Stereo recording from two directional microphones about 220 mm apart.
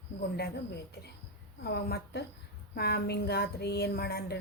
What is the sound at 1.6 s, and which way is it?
A woman's voice, 45° left (ahead or behind).